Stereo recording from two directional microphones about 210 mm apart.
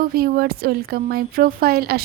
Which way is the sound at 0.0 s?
45° right (ahead or behind).